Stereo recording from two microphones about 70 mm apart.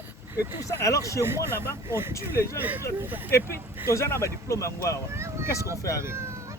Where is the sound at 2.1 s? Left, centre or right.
Left.